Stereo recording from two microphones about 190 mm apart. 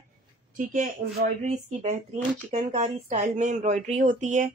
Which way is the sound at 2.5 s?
35° right (ahead or behind).